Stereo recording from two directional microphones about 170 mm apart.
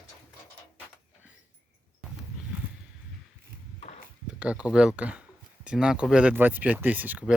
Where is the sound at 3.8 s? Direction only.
40° left (ahead or behind).